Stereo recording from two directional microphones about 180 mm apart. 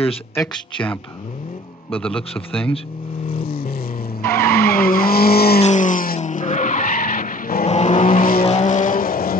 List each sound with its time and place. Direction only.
1.9 s a man's voice: 5° left (ahead or behind)
3.4 s vehicle: 55° left (ahead or behind)
4.4 s vehicle: 10° left (ahead or behind)
4.6 s vehicle: 55° left (ahead or behind)
5.6 s skidding: 45° left (ahead or behind)
7.6 s vehicle: 40° left (ahead or behind)